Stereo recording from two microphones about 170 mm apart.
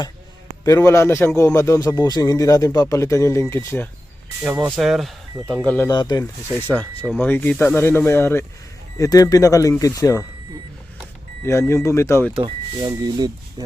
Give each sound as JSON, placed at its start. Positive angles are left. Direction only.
{"t": 0.6, "sound": "speech", "side_deg": 20}
{"t": 4.4, "sound": "speech", "side_deg": -5}
{"t": 5.6, "sound": "speech", "side_deg": 10}
{"t": 5.9, "sound": "speech", "side_deg": 25}
{"t": 7.2, "sound": "speech", "side_deg": 10}
{"t": 11.4, "sound": "speech", "side_deg": 15}
{"t": 12.4, "sound": "speech", "side_deg": -30}